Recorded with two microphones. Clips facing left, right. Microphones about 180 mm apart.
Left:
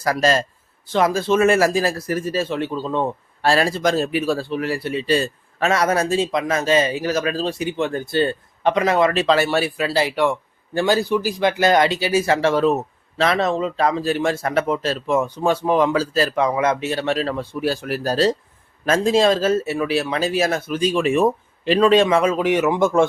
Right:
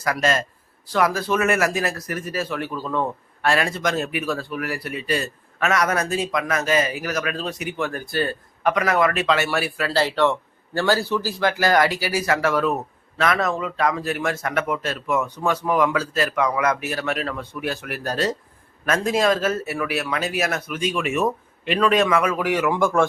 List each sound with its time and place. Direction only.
0.0 s a man's voice: 35° left (ahead or behind)